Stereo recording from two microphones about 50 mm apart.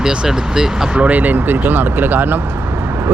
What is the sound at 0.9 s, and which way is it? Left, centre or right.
Speech, right.